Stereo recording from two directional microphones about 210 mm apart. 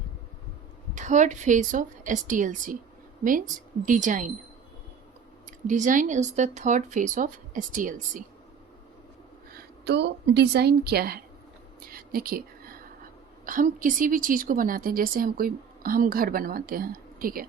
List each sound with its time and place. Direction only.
0.9 s speech: 35° right (ahead or behind)
5.6 s speech: 35° right (ahead or behind)
9.8 s a woman's voice: 55° right (ahead or behind)
11.9 s a sound: 45° right (ahead or behind)
13.4 s a woman's voice: 40° right (ahead or behind)